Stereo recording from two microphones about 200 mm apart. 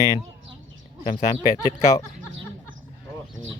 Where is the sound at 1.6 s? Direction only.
15° left (ahead or behind).